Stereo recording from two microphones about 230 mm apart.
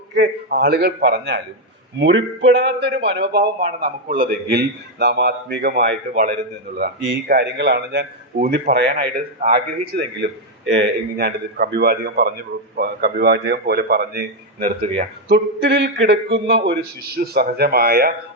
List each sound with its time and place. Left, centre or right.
0.1 s a man's voice: right